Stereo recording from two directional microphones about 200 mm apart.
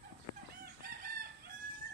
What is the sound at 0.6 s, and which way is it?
Chicken, 45° right (ahead or behind).